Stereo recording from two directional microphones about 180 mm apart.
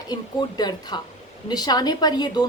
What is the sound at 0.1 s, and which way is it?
A woman's voice, 20° left (ahead or behind).